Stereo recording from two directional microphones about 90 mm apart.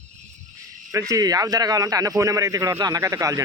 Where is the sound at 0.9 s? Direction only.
35° right (ahead or behind).